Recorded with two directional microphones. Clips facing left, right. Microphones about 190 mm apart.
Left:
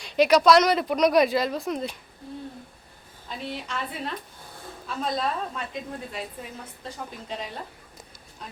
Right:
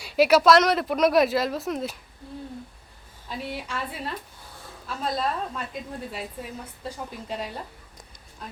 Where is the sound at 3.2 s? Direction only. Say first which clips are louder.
Right 1 dB; 10° right (ahead or behind).